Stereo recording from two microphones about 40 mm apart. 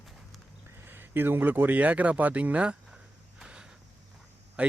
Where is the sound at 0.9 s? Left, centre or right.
Right.